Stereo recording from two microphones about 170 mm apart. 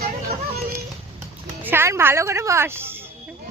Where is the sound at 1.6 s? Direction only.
10° right (ahead or behind).